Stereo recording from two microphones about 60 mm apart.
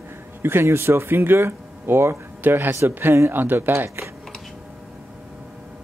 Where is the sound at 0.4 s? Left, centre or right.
Right.